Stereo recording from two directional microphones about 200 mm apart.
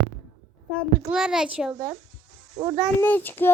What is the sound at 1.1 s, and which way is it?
Speech, 5° right (ahead or behind).